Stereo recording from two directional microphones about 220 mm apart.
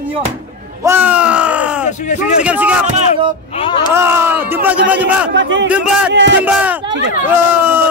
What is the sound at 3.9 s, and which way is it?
Speech, 10° right (ahead or behind).